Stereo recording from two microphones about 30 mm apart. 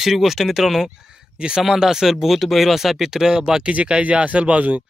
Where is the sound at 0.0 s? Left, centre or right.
Centre.